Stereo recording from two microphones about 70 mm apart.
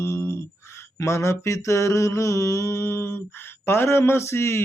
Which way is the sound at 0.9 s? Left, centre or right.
Left.